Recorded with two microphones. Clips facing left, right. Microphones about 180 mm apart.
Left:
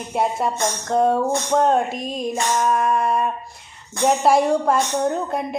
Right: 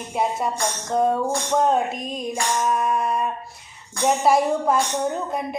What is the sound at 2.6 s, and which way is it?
Music, centre (ahead or behind).